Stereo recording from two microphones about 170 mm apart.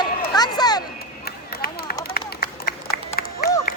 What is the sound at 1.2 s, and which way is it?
Chop, 65° left (ahead or behind).